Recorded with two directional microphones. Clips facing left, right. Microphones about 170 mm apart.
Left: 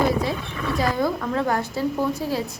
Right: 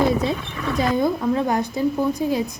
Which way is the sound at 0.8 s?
20° right (ahead or behind).